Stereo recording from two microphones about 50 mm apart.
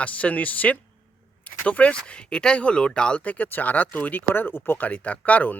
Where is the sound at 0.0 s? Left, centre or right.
Left.